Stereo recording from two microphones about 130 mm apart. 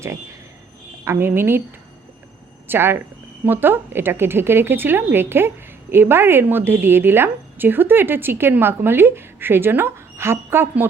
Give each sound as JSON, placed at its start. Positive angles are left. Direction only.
{"t": 0.0, "sound": "a woman's voice", "side_deg": -20}
{"t": 2.6, "sound": "a woman's voice", "side_deg": -15}